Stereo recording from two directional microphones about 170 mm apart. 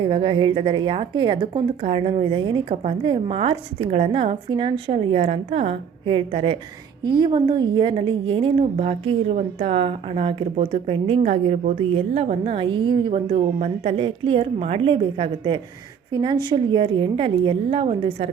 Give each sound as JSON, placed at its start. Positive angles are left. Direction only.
{"t": 0.0, "sound": "a woman's voice", "side_deg": -30}